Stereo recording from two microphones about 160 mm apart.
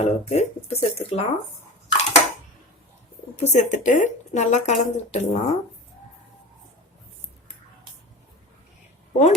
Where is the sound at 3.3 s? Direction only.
45° left (ahead or behind).